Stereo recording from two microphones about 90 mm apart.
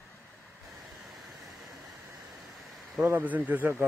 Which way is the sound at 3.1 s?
20° right (ahead or behind).